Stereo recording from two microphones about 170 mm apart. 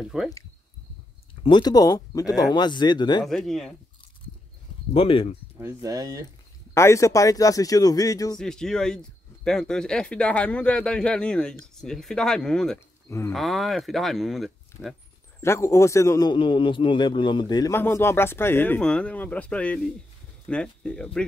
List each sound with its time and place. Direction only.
0.0 s speech: 5° right (ahead or behind)
1.4 s speech: 25° left (ahead or behind)
3.3 s speech: centre (ahead or behind)
4.9 s speech: 35° left (ahead or behind)
5.6 s speech: 15° right (ahead or behind)
6.7 s speech: 15° left (ahead or behind)
8.4 s speech: 5° left (ahead or behind)
15.4 s a man's voice: 15° left (ahead or behind)